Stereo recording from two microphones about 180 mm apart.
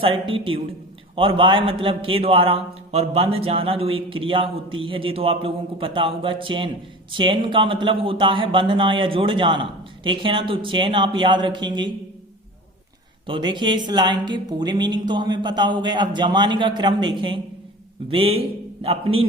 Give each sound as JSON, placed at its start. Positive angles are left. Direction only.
{"t": 0.0, "sound": "a man's voice", "side_deg": -30}
{"t": 13.2, "sound": "a man's voice", "side_deg": -25}